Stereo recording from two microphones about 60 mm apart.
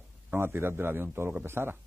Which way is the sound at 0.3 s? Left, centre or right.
Right.